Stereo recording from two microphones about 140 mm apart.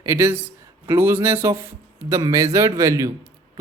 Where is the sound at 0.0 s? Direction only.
20° right (ahead or behind).